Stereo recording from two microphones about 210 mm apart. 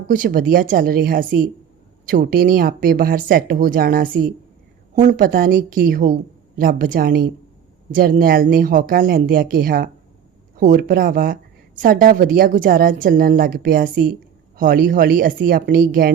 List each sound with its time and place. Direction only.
0.1 s a woman's voice: 40° right (ahead or behind)